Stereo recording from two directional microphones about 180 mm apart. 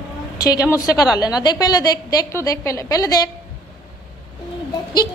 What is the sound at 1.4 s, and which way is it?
A woman's voice, 20° left (ahead or behind).